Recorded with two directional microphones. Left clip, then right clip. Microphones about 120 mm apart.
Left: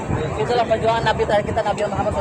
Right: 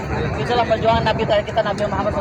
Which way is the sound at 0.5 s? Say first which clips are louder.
Right 2 dB; 20° right (ahead or behind).